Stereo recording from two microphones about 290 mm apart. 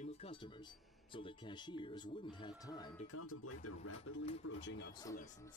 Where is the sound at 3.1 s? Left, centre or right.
Left.